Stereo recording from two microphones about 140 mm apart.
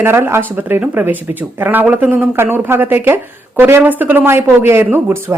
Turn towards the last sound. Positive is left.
turn(degrees=-15)  # may be behind; listen again after turning